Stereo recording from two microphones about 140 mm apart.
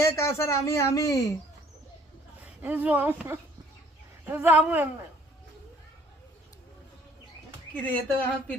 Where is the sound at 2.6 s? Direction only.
10° right (ahead or behind).